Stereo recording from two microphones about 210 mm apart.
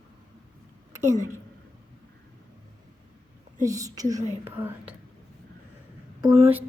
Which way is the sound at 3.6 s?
15° right (ahead or behind).